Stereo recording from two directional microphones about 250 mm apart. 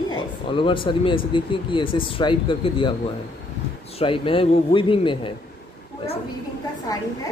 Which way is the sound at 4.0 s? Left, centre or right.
Left.